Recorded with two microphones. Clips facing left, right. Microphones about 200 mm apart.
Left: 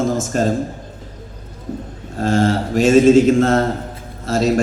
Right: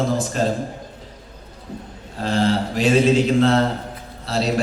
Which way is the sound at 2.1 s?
45° left (ahead or behind).